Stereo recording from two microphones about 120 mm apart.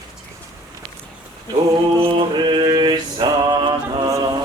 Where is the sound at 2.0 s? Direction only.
40° right (ahead or behind).